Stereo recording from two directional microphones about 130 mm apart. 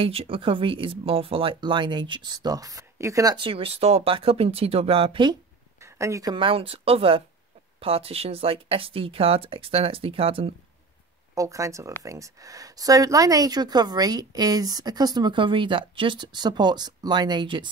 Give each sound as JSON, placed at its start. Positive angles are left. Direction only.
{"t": 0.0, "sound": "speech", "side_deg": -45}
{"t": 3.3, "sound": "speech", "side_deg": -45}
{"t": 5.8, "sound": "a sound", "side_deg": -20}
{"t": 6.3, "sound": "speech", "side_deg": -45}
{"t": 11.3, "sound": "speech", "side_deg": -25}